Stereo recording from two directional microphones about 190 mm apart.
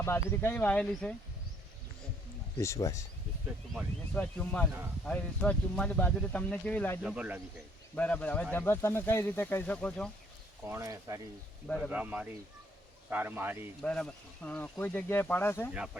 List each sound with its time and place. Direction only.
0.0 s speech: 15° left (ahead or behind)
2.6 s speech: 15° left (ahead or behind)
7.0 s speech: 5° right (ahead or behind)
7.9 s speech: 5° left (ahead or behind)
10.7 s speech: 15° right (ahead or behind)
13.8 s speech: 5° left (ahead or behind)